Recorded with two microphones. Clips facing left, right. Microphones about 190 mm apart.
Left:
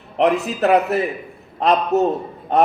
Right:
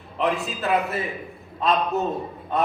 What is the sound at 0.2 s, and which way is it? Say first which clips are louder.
A man's voice: left 8 dB; 75° left (ahead or behind).